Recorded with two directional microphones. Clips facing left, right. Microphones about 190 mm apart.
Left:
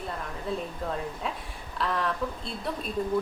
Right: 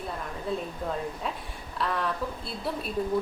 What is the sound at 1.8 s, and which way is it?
Speech, centre (ahead or behind).